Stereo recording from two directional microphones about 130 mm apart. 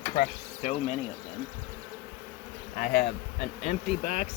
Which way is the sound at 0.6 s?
60° left (ahead or behind).